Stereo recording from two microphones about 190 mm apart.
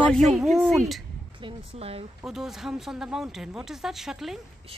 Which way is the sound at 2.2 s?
Centre (ahead or behind).